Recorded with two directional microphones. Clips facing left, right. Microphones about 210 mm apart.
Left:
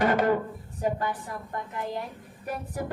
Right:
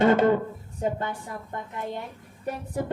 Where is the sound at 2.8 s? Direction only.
25° right (ahead or behind).